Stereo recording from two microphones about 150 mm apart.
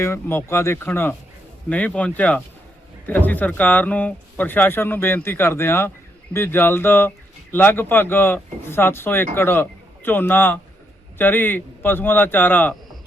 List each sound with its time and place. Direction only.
0.0 s speech: 15° left (ahead or behind)